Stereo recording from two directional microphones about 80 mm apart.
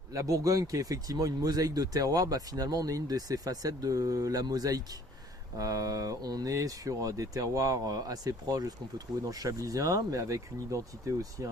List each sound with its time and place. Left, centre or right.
0.1 s speech: right